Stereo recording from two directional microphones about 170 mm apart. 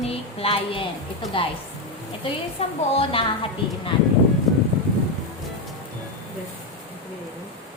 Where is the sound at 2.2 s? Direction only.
35° left (ahead or behind).